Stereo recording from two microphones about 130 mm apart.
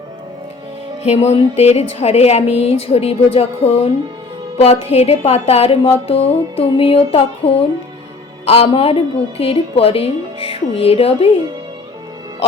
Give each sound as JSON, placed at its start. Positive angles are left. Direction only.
{"t": 1.0, "sound": "speech", "side_deg": 55}